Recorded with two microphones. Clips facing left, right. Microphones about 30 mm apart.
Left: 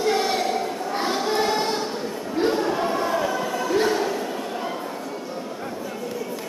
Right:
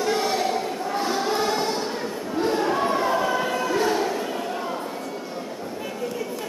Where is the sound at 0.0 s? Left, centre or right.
Centre.